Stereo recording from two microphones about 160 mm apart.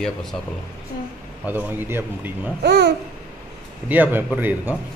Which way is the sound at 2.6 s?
90° right.